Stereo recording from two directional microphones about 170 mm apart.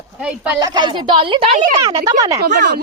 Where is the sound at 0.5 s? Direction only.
25° right (ahead or behind).